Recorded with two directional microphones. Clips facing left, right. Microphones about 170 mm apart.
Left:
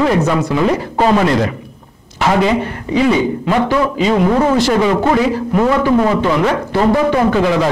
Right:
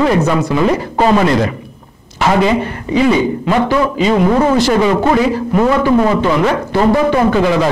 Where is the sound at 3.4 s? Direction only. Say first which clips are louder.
Right 1 dB; 20° right (ahead or behind).